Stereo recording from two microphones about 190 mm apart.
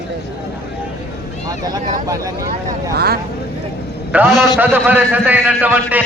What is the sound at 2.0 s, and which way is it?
Speech, 20° right (ahead or behind).